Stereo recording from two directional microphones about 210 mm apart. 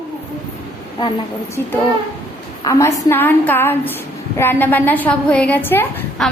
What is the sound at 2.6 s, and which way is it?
A woman's voice, 15° left (ahead or behind).